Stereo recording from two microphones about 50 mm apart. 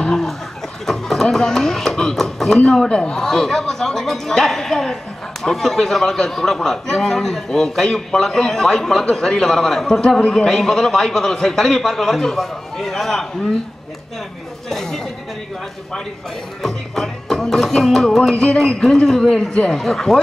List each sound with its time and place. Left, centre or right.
0.0 s chicken: centre
0.8 s music: centre
2.6 s speech: centre
14.7 s a sound: centre
16.6 s music: centre
18.3 s speech: left
18.6 s speech: centre